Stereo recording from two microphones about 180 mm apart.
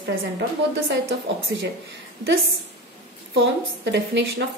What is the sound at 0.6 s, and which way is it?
Speech, 90° right.